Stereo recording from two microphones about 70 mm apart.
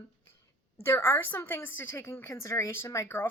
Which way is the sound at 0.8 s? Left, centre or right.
Left.